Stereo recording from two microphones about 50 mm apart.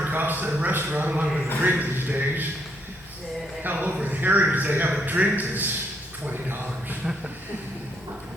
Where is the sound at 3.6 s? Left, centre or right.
Right.